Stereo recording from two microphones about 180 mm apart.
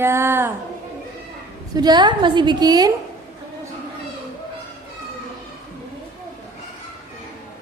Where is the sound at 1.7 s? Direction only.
25° right (ahead or behind).